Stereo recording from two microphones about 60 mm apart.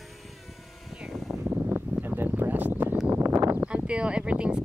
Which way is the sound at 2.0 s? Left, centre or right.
Right.